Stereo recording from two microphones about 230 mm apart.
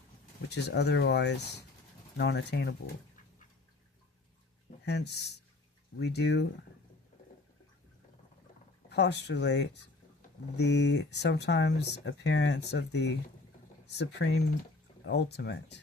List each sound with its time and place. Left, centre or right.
0.5 s speech: left
4.9 s speech: left
8.9 s speech: left